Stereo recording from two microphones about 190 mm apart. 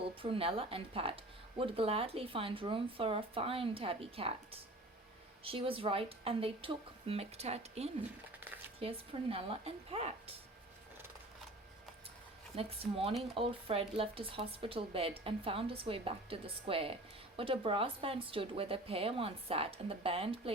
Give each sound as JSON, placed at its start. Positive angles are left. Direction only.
{"t": 0.2, "sound": "speech", "side_deg": -30}
{"t": 5.4, "sound": "a woman's voice", "side_deg": -30}
{"t": 12.5, "sound": "a woman's voice", "side_deg": -30}